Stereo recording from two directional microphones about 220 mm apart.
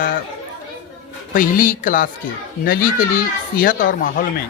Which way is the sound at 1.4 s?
35° left (ahead or behind).